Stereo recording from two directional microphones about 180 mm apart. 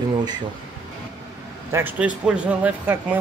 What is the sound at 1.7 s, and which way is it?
Speech, 10° right (ahead or behind).